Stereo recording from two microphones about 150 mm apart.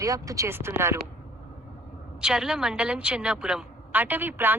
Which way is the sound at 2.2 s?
5° right (ahead or behind).